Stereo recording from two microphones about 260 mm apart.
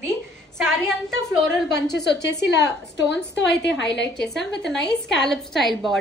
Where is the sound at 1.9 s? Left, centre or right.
Left.